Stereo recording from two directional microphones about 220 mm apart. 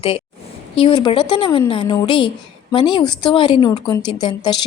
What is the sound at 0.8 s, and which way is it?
A woman's voice, 25° left (ahead or behind).